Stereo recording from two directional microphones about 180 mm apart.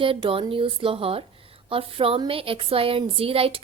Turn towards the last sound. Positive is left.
turn(degrees=-30)  # may be behind; listen again after turning